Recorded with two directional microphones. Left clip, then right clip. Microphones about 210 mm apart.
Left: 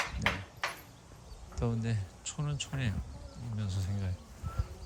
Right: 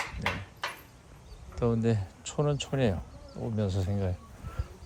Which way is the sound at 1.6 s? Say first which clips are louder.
Right 9 dB; centre (ahead or behind).